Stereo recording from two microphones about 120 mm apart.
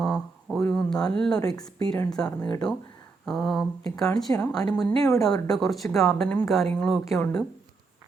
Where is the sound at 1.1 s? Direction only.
5° left (ahead or behind).